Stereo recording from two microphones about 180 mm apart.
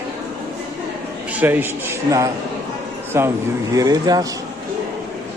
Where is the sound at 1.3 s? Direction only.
10° right (ahead or behind).